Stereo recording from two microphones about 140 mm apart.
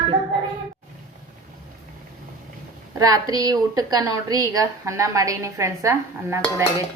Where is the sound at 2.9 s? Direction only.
25° right (ahead or behind).